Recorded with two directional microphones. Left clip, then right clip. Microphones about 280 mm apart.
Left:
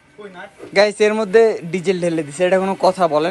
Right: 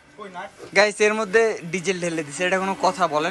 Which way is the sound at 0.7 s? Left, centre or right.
Centre.